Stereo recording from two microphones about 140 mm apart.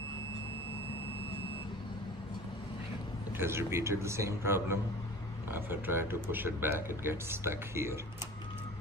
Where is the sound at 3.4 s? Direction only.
20° right (ahead or behind).